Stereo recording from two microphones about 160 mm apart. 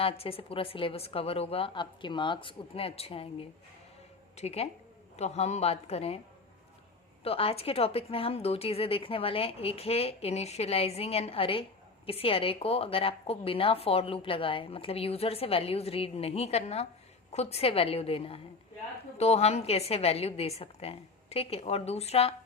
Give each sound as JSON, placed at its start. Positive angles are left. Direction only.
{"t": 0.0, "sound": "a woman's voice", "side_deg": 35}
{"t": 7.3, "sound": "a woman's voice", "side_deg": 35}